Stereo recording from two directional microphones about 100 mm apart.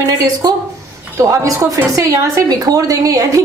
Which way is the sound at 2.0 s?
35° right (ahead or behind).